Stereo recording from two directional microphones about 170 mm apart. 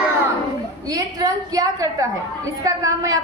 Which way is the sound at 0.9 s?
20° right (ahead or behind).